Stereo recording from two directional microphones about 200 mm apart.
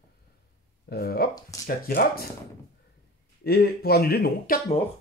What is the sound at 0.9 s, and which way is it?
Speech, 50° left (ahead or behind).